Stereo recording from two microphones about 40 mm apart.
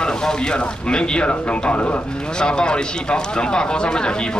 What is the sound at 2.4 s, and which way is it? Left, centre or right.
A man's voice, left.